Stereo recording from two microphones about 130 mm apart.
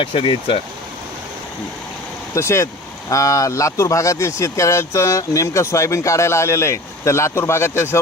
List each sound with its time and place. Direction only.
0.0 s speech: 40° left (ahead or behind)
2.3 s speech: 20° left (ahead or behind)